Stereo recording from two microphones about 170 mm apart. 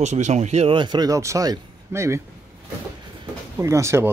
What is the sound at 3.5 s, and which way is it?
Speech, 15° right (ahead or behind).